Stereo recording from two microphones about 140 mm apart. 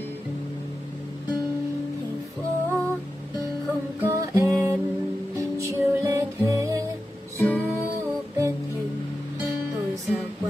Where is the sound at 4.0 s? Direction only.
20° right (ahead or behind).